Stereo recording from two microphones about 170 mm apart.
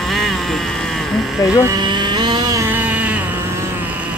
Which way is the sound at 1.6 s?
25° right (ahead or behind).